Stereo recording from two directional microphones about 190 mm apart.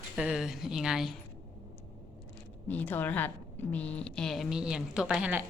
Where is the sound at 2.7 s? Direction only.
10° left (ahead or behind).